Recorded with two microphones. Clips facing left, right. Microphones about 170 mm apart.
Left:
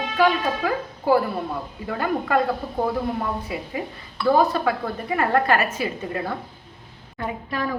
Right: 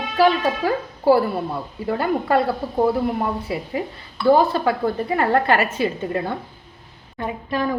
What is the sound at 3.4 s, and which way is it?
Speech, 35° right (ahead or behind).